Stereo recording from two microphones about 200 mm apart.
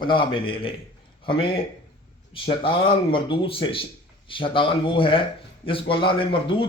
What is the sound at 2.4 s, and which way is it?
A man's voice, 25° left (ahead or behind).